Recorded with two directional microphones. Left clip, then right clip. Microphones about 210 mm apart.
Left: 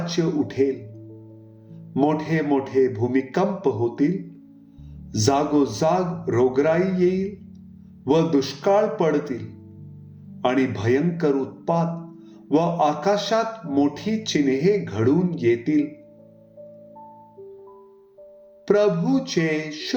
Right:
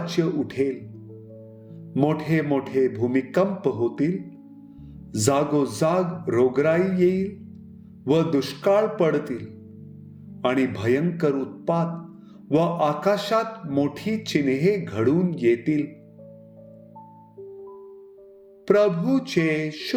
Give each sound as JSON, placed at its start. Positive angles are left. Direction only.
{"t": 0.0, "sound": "a man's voice", "side_deg": -40}
{"t": 1.9, "sound": "a man's voice", "side_deg": -40}
{"t": 5.1, "sound": "a man's voice", "side_deg": -40}
{"t": 18.7, "sound": "a man's voice", "side_deg": -40}